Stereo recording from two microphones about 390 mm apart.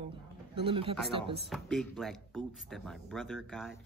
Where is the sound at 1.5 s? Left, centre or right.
Centre.